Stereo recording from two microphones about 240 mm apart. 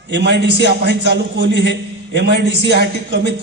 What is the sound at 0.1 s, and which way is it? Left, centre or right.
A man's voice, right.